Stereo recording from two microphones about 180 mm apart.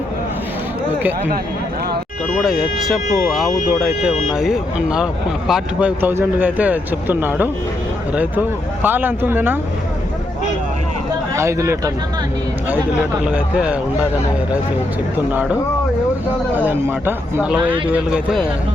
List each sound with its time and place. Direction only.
2.4 s speech: centre (ahead or behind)
11.3 s speech: 15° right (ahead or behind)
13.2 s speech: 5° right (ahead or behind)
15.3 s speech: 10° right (ahead or behind)
16.6 s speech: 10° right (ahead or behind)